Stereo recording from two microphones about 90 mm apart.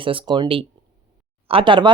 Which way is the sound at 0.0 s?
75° right (ahead or behind).